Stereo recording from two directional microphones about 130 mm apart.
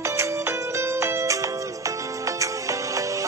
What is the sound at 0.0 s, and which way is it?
Music, 20° right (ahead or behind).